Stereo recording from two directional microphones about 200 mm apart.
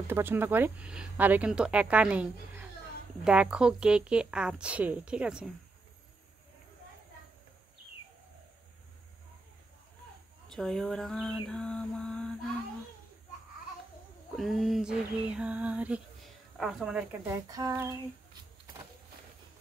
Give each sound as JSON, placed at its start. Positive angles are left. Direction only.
{"t": 0.1, "sound": "speech", "side_deg": -10}
{"t": 3.3, "sound": "a woman's voice", "side_deg": -5}
{"t": 10.5, "sound": "a woman's voice", "side_deg": 0}
{"t": 14.3, "sound": "a woman's voice", "side_deg": 0}
{"t": 17.3, "sound": "speech", "side_deg": -15}